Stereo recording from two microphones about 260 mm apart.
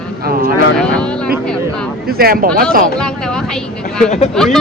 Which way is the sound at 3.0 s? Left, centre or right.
Centre.